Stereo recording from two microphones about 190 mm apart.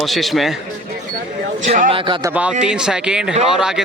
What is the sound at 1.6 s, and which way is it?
Speech, 35° right (ahead or behind).